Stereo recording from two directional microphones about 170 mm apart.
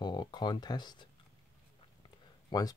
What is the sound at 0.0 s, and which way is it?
Speech, 25° left (ahead or behind).